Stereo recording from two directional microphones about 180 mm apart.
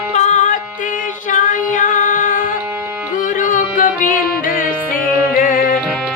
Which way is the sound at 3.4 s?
50° left (ahead or behind).